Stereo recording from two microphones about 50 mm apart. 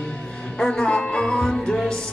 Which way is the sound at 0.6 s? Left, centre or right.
Centre.